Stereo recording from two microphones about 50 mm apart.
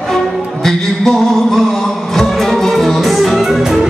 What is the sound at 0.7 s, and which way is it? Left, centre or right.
Music, centre.